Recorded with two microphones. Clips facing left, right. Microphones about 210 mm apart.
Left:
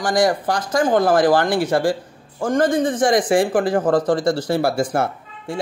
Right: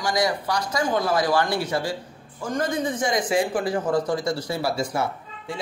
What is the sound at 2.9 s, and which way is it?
Speech, 85° left.